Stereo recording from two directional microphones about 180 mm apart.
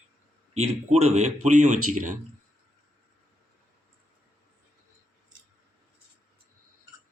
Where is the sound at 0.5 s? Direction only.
35° right (ahead or behind).